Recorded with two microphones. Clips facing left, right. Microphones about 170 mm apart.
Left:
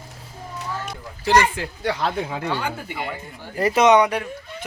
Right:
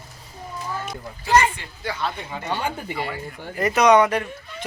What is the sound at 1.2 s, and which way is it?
Speech, 85° left.